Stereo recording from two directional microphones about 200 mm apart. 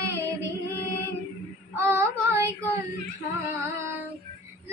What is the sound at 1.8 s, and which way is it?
Child singing, 15° right (ahead or behind).